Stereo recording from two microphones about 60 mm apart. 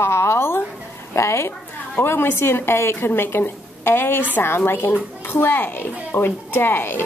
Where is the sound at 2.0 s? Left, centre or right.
Left.